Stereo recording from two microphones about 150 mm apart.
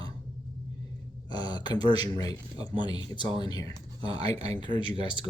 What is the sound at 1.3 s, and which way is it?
Speech, 30° left (ahead or behind).